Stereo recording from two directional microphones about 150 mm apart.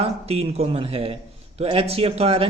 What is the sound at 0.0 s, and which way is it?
A man's voice, 40° right (ahead or behind).